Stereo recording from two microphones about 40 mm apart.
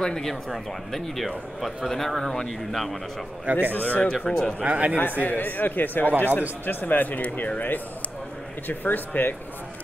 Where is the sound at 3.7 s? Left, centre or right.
Left.